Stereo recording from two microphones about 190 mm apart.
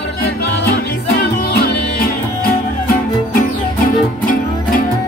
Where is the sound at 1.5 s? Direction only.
55° left (ahead or behind).